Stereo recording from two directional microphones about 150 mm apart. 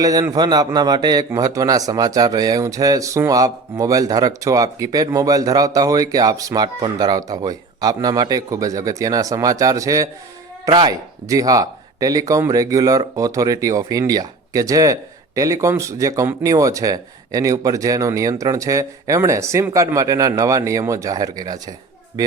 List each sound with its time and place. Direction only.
0.0 s speech: 25° right (ahead or behind)